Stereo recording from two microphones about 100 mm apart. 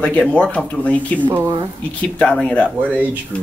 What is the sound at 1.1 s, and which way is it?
Speech, 15° right (ahead or behind).